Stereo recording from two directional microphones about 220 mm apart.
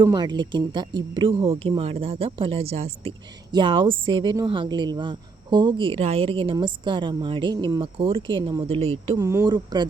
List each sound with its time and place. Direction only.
0.0 s a woman's voice: 20° right (ahead or behind)